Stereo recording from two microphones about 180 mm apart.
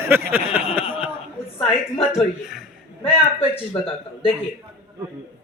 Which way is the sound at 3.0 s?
30° left (ahead or behind).